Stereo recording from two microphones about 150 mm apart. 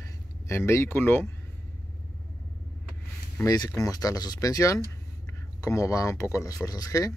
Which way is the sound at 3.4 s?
25° left (ahead or behind).